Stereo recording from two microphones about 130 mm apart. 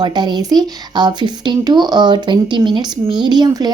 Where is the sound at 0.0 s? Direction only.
35° right (ahead or behind).